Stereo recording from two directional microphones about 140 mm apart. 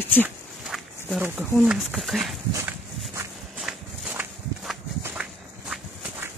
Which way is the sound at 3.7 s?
5° right (ahead or behind).